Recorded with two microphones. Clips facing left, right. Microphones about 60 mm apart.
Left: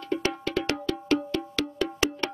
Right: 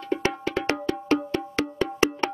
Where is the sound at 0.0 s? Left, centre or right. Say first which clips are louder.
Right 2 dB; right.